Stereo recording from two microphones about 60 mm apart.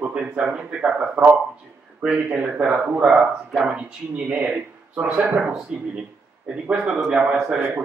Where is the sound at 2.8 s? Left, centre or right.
Centre.